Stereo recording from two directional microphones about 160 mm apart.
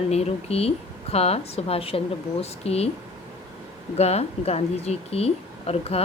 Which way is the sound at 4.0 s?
40° left (ahead or behind).